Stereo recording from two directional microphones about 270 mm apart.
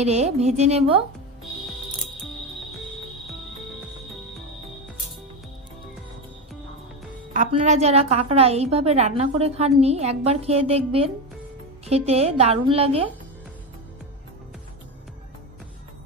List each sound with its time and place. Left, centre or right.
0.0 s a woman's voice: right
7.3 s a woman's voice: right
11.8 s a woman's voice: right